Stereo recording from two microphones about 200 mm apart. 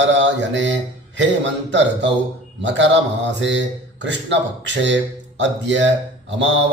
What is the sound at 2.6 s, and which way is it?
Mantra, 65° right (ahead or behind).